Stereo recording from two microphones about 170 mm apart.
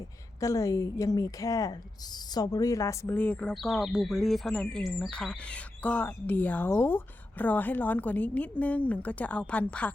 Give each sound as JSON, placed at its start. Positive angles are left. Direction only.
{"t": 0.3, "sound": "a woman's voice", "side_deg": 20}